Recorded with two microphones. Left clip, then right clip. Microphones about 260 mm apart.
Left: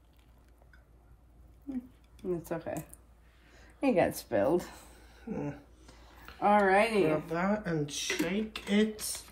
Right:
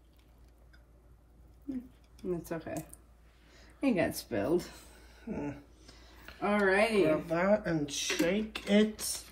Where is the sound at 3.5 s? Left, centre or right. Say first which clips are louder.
Left 4 dB; left.